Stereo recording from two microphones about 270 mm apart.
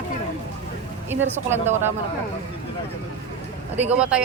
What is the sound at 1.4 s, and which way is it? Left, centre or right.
Speech, centre.